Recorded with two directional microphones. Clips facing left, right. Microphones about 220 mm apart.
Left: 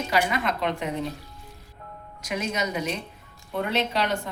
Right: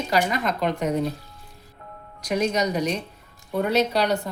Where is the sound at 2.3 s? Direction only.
40° right (ahead or behind).